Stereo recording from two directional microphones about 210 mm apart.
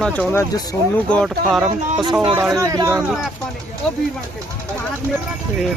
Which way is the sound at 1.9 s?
20° right (ahead or behind).